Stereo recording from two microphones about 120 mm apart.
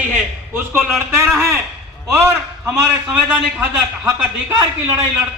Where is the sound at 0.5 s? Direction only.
20° right (ahead or behind).